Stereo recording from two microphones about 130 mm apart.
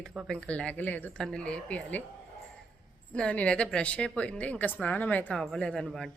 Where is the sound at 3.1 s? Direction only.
10° left (ahead or behind).